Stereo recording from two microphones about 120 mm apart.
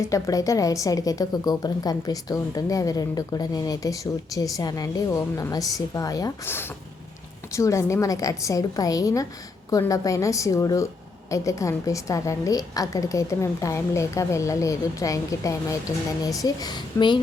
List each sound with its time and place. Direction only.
0.0 s a woman's voice: 30° left (ahead or behind)
6.4 s a woman's voice: 20° left (ahead or behind); by 17.2 s 35° left (ahead or behind)